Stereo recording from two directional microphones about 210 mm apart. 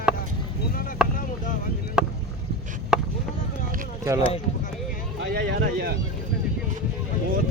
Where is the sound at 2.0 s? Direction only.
5° right (ahead or behind).